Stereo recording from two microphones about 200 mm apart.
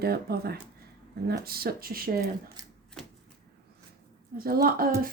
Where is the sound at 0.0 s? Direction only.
50° right (ahead or behind).